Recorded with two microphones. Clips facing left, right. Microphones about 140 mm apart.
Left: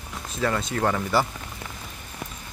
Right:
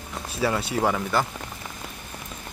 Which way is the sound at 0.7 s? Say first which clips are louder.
Right 1 dB; 10° right (ahead or behind).